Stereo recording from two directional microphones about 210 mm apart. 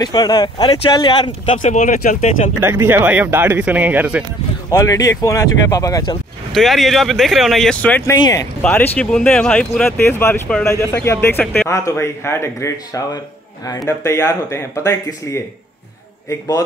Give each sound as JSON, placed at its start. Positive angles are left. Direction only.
{"t": 0.0, "sound": "speech", "side_deg": 20}
{"t": 2.6, "sound": "speech", "side_deg": -10}
{"t": 4.6, "sound": "speech", "side_deg": 15}
{"t": 6.5, "sound": "speech", "side_deg": 0}